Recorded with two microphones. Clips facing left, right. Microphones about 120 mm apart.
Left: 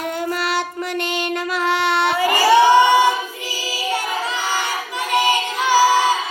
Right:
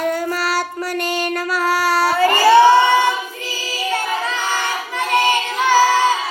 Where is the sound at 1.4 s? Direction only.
25° left (ahead or behind).